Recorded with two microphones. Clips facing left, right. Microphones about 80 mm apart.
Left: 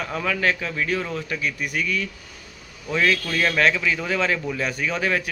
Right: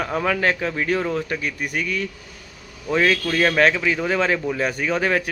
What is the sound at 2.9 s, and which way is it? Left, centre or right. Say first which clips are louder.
A man's voice: right 3 dB; right.